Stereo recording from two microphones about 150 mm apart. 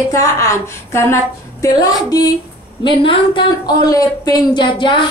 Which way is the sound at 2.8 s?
35° left (ahead or behind).